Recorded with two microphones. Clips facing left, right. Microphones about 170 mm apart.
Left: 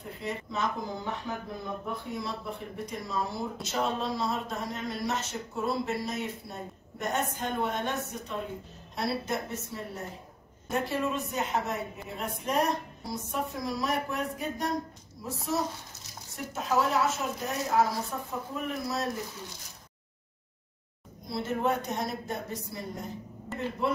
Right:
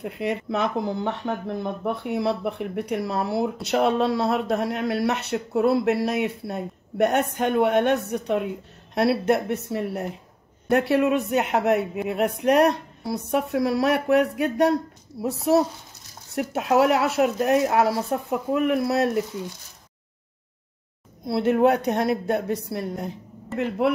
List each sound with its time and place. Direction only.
0.0 s speech: 65° right (ahead or behind)
21.3 s speech: 65° right (ahead or behind)